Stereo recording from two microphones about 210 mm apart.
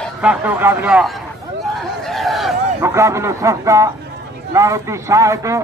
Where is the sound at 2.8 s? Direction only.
15° right (ahead or behind).